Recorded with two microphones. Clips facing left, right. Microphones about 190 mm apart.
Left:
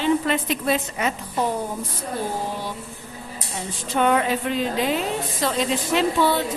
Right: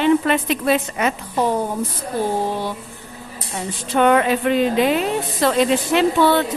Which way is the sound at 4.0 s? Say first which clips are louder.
Right 5 dB; 70° right (ahead or behind).